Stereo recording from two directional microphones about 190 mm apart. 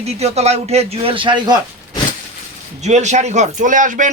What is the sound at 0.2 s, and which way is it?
Speech, 35° right (ahead or behind).